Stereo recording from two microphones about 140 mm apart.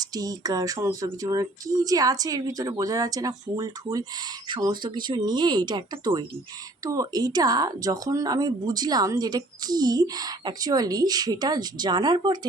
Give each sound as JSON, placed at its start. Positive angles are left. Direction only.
{"t": 0.0, "sound": "speech", "side_deg": -25}